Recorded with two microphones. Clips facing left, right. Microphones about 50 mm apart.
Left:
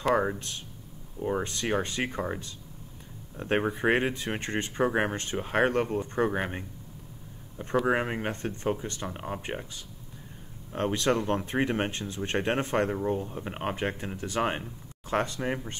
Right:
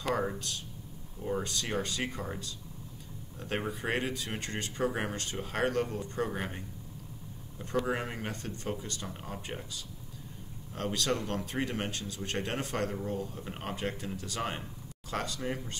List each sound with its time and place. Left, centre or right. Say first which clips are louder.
0.3 s speech: left 3 dB; left
7.8 s speech: left 7 dB; left